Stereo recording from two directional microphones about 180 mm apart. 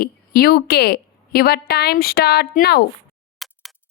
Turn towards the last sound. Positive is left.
turn(degrees=0)  # may be behind; listen again after turning